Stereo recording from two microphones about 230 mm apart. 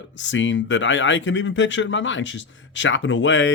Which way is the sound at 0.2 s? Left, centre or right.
Left.